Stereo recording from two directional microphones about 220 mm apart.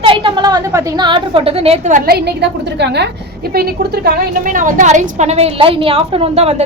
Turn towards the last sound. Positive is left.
turn(degrees=-30)  # may be behind; listen again after turning